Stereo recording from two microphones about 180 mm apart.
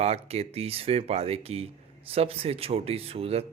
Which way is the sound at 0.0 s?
35° right (ahead or behind).